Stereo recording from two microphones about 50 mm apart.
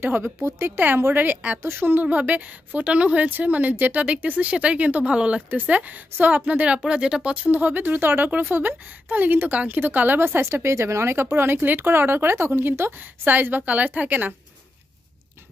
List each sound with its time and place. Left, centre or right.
0.0 s speech: right
0.4 s speech: right
0.7 s speech: right
1.6 s speech: right
5.5 s speech: right
6.8 s speech: centre
7.3 s speech: right